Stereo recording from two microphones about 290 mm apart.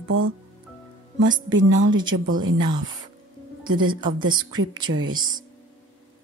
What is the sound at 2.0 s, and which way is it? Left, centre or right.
Speech, right.